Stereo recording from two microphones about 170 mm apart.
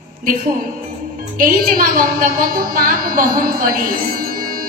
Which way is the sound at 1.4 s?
55° right (ahead or behind).